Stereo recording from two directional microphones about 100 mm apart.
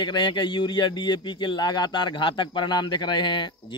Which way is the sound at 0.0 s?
50° left (ahead or behind).